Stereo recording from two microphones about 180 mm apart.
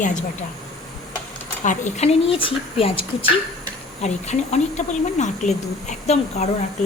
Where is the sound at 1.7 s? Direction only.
40° left (ahead or behind).